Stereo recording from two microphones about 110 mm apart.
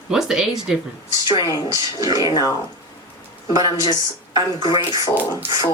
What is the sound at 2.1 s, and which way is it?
Speech, 40° left (ahead or behind).